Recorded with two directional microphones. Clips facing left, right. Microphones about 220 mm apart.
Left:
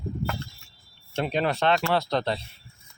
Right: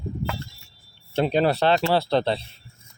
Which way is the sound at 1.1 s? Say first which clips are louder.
Right 5 dB; 35° right (ahead or behind).